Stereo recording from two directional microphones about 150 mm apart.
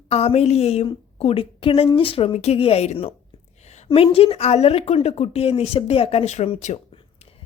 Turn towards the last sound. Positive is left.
turn(degrees=50)  # may be behind; listen again after turning